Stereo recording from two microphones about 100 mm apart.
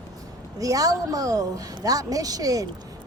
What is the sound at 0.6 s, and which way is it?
Speech, 35° right (ahead or behind).